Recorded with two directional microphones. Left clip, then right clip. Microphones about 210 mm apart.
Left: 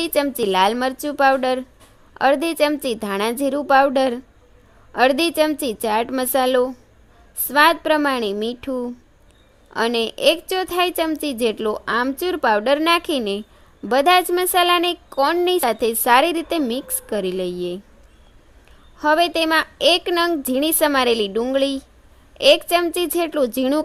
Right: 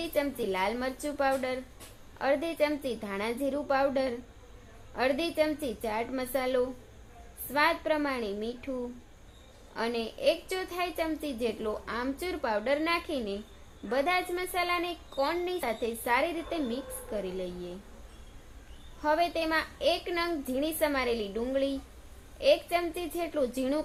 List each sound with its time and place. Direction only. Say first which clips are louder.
0.0 s a woman's voice: left 11 dB; 50° left (ahead or behind)
18.9 s a woman's voice: left 11 dB; 50° left (ahead or behind)